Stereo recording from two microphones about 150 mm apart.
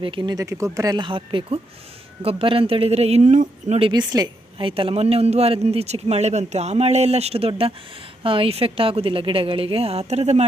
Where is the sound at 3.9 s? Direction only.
30° right (ahead or behind).